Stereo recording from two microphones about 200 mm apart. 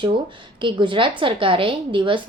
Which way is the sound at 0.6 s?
25° right (ahead or behind).